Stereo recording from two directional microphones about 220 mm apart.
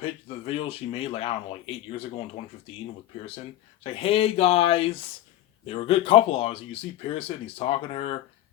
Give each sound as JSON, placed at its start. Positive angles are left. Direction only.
{"t": 0.0, "sound": "speech", "side_deg": 25}
{"t": 3.8, "sound": "speech", "side_deg": 25}